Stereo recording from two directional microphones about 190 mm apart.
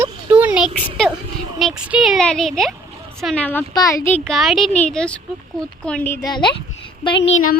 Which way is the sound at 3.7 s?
20° left (ahead or behind).